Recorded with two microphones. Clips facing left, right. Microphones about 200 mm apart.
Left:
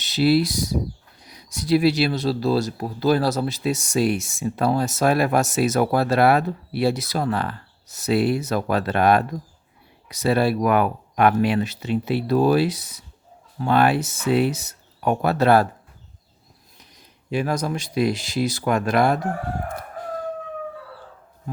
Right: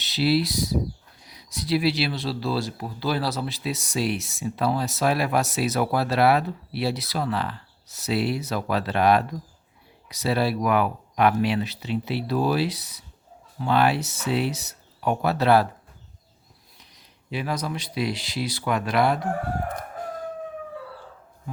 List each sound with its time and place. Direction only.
0.0 s speech: 50° left (ahead or behind)
16.9 s speech: 45° left (ahead or behind)